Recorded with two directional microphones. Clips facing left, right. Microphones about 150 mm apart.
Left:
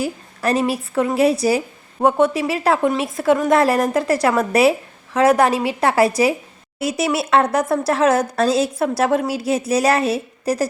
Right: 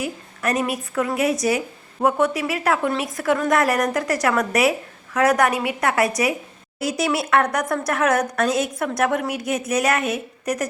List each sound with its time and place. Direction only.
0.0 s a woman's voice: 30° left (ahead or behind)